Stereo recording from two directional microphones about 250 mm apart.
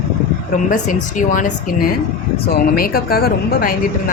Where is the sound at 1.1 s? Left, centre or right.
Left.